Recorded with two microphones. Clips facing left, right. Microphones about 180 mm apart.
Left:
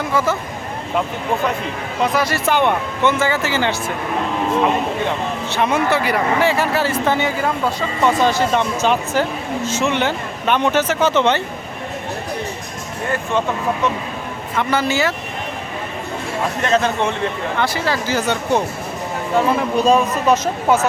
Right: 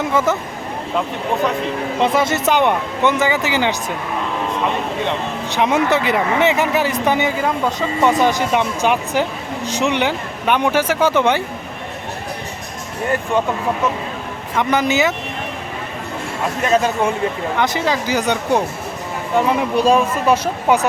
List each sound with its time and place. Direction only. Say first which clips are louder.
0.1 s speech: right 1 dB; 20° right (ahead or behind)
2.0 s speech: right 1 dB; 25° right (ahead or behind)
5.5 s speech: right 2 dB; 15° right (ahead or behind)
14.6 s speech: right 2 dB; 15° right (ahead or behind)
16.6 s speech: right 2 dB; 10° right (ahead or behind)